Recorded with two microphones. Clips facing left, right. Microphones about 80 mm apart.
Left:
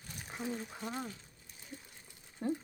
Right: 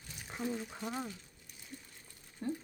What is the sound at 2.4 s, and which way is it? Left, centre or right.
Speech, left.